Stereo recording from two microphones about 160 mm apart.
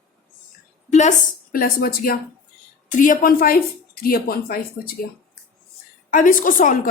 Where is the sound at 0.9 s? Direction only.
45° left (ahead or behind); by 2.2 s 65° left (ahead or behind).